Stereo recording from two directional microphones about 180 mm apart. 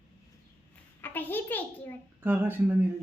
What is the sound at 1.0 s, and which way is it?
Speech, 10° left (ahead or behind).